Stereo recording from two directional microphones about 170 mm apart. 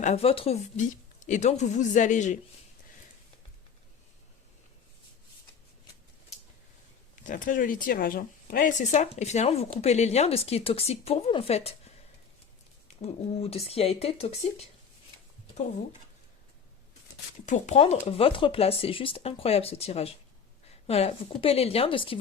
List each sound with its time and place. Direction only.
0.0 s a woman's voice: 40° left (ahead or behind)
7.3 s a woman's voice: 50° left (ahead or behind); by 11.7 s 35° left (ahead or behind)
13.0 s speech: 35° left (ahead or behind)
17.4 s a woman's voice: 45° left (ahead or behind)